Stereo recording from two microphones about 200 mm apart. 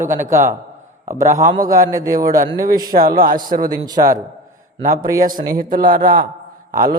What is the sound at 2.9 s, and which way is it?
Speech, 45° right (ahead or behind).